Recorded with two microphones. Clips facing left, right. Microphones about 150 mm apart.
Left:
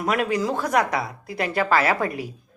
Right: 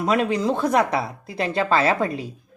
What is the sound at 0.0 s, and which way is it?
A woman's voice, 25° right (ahead or behind).